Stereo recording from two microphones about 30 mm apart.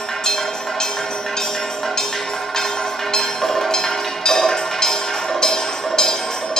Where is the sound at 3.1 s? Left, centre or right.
Centre.